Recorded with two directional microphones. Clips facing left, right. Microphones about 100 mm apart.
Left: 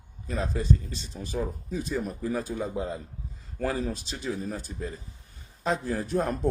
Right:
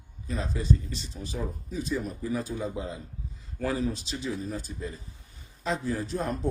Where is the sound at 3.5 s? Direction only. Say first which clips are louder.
Even; 45° left (ahead or behind).